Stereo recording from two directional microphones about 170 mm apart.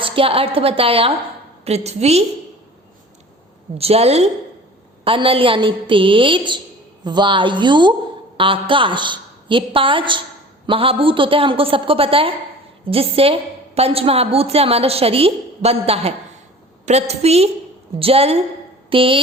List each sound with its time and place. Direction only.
0.0 s a woman's voice: 35° right (ahead or behind)
3.8 s a woman's voice: 35° right (ahead or behind)